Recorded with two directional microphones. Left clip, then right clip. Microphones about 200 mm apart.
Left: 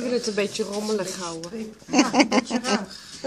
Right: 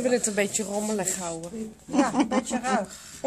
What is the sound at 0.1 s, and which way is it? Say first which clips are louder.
Speech: even; 40° right (ahead or behind).